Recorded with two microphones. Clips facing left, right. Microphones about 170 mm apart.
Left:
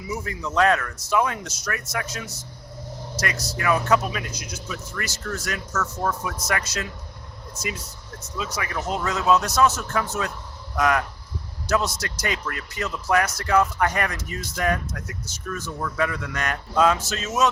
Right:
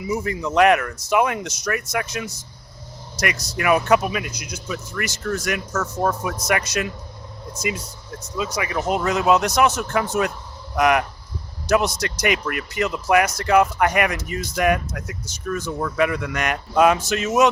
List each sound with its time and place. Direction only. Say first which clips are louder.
0.1 s a man's voice: right 5 dB; 15° right (ahead or behind)
8.4 s a man's voice: right 5 dB; 15° right (ahead or behind)